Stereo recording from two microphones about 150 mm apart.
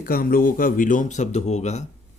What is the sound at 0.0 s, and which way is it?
Speech, 80° left.